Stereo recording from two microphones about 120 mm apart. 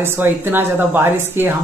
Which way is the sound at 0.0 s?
15° right (ahead or behind).